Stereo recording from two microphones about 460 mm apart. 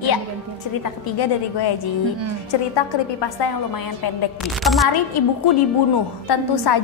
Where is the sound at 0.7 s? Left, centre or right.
Left.